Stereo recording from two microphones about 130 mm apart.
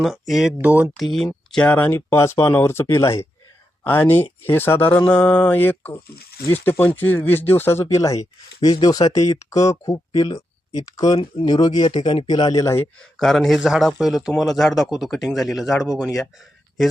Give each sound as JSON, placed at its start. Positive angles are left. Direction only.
{"t": 0.0, "sound": "a man's voice", "side_deg": 0}
{"t": 0.6, "sound": "speech", "side_deg": -15}
{"t": 0.9, "sound": "speech", "side_deg": 0}
{"t": 13.0, "sound": "a man's voice", "side_deg": 5}